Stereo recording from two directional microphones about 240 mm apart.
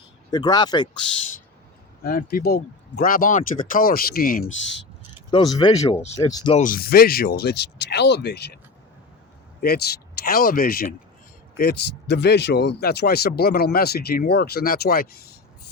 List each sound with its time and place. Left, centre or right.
0.3 s speech: centre
2.0 s speech: left
5.3 s speech: centre
6.6 s speech: left
9.6 s speech: left